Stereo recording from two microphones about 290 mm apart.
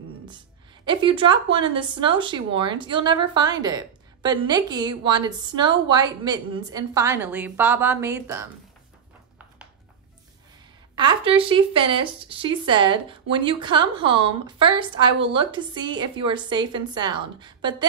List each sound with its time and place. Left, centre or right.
0.8 s speech: centre
11.0 s speech: centre